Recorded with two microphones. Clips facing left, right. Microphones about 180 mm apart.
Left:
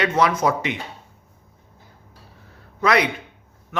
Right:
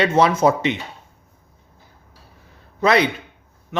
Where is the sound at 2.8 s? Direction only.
25° right (ahead or behind).